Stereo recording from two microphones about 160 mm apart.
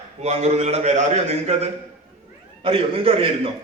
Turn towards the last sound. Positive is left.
turn(degrees=-35)  # may be behind; listen again after turning